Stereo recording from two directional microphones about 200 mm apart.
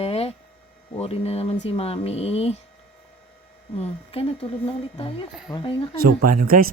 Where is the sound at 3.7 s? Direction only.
30° left (ahead or behind).